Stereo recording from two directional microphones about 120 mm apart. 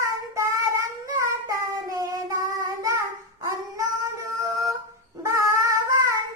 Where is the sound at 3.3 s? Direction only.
30° right (ahead or behind).